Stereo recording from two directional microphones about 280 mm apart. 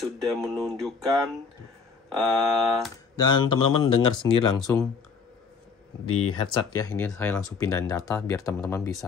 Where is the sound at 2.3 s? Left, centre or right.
Centre.